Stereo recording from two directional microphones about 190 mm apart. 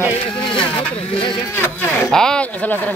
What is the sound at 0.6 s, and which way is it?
Speech, 10° left (ahead or behind).